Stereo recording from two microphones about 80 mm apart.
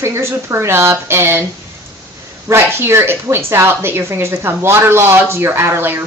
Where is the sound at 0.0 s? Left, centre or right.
Right.